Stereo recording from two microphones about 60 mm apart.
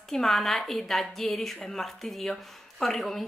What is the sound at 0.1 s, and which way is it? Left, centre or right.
Speech, centre.